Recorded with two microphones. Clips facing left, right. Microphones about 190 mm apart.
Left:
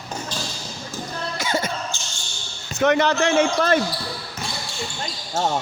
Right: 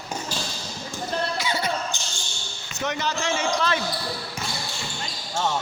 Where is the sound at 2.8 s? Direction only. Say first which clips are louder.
Left 9 dB; 60° left (ahead or behind).